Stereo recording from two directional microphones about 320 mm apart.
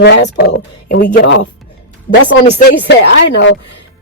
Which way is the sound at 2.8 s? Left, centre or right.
Left.